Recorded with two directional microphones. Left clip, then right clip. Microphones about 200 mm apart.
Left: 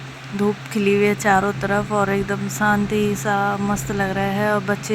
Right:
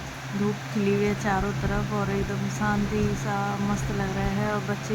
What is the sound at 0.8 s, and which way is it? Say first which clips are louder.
Speech: left 9 dB; 30° left (ahead or behind).